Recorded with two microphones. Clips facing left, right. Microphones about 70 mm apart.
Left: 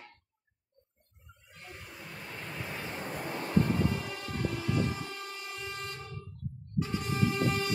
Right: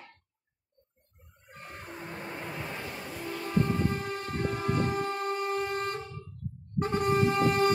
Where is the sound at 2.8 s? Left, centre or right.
Left.